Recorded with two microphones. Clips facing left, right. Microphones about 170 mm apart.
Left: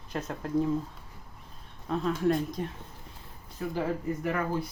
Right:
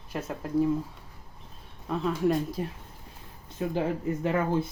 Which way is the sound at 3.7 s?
25° right (ahead or behind).